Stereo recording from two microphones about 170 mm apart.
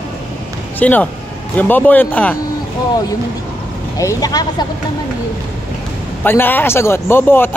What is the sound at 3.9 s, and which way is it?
Speech, 20° left (ahead or behind).